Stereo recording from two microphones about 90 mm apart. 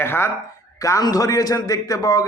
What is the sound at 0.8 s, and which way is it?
A man's voice, 40° left (ahead or behind).